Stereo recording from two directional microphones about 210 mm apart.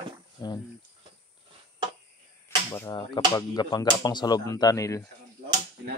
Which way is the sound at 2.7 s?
15° left (ahead or behind).